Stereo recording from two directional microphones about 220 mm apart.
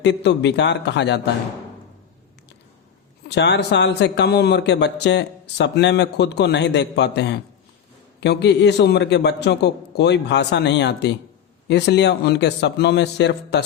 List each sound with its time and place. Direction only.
0.0 s a man's voice: 50° left (ahead or behind)
3.2 s a man's voice: 50° left (ahead or behind)